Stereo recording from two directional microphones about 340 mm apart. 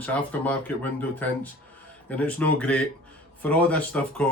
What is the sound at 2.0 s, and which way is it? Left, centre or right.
Speech, centre.